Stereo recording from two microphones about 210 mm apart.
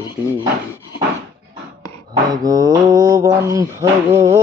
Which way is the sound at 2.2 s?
15° right (ahead or behind).